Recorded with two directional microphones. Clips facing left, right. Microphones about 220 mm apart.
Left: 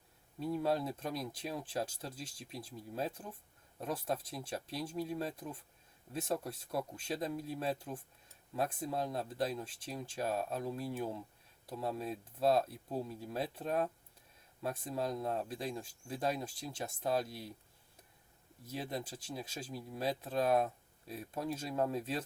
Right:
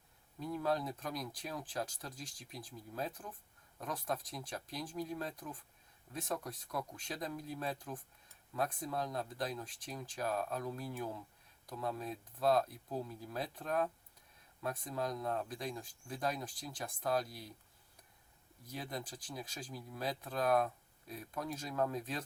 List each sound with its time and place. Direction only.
0.3 s speech: 30° left (ahead or behind)
18.6 s speech: 25° left (ahead or behind)